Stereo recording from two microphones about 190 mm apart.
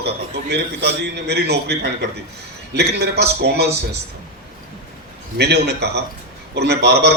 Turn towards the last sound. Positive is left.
turn(degrees=-60)  # may be behind; listen again after turning